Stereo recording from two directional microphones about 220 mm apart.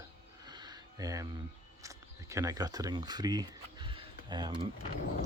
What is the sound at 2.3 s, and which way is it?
Speech, 15° right (ahead or behind).